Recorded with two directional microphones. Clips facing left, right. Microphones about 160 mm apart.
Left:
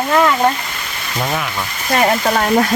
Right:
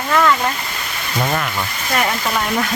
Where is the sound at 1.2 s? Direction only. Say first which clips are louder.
Even; centre (ahead or behind).